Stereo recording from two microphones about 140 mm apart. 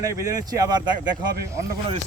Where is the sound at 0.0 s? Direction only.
20° right (ahead or behind).